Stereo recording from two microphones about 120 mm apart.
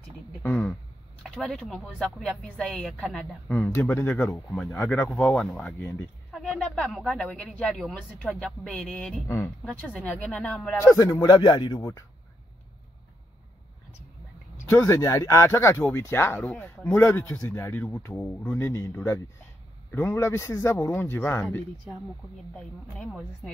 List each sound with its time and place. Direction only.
0.4 s a woman's voice: 10° left (ahead or behind)
4.5 s speech: 5° left (ahead or behind)
4.7 s speech: 20° left (ahead or behind)
5.1 s a woman's voice: 5° left (ahead or behind)
6.3 s a sound: centre (ahead or behind)
6.6 s a woman's voice: 10° left (ahead or behind)
10.8 s speech: 25° left (ahead or behind)
14.9 s a woman's voice: 25° left (ahead or behind)
22.5 s a woman's voice: 5° left (ahead or behind)